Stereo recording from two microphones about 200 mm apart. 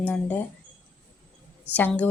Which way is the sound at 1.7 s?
5° left (ahead or behind).